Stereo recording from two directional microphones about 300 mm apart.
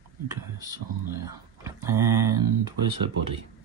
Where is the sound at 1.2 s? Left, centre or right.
Centre.